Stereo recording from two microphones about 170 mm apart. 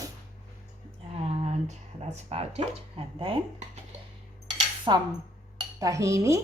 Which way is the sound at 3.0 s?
35° right (ahead or behind).